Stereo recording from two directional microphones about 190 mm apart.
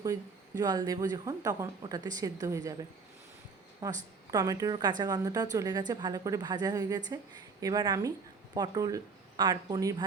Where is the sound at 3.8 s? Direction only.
20° right (ahead or behind).